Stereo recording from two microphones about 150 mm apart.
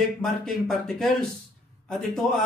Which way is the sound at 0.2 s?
Centre (ahead or behind).